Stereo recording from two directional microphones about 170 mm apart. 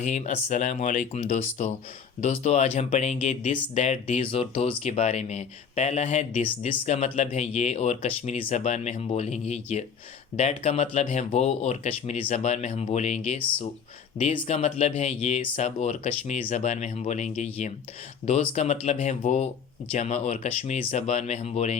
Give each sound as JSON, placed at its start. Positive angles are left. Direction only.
{"t": 0.0, "sound": "speech", "side_deg": 45}